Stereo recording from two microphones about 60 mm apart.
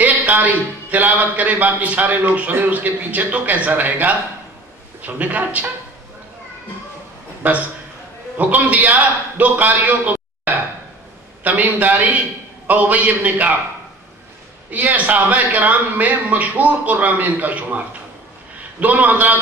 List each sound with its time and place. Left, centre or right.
0.0 s a man's voice: right
7.4 s a man's voice: right
14.7 s a man's voice: right